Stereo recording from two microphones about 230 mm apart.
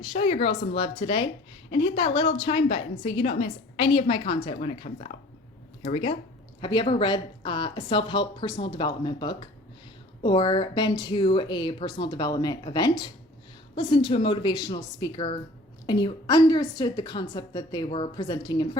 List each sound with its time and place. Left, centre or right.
0.0 s a woman's voice: left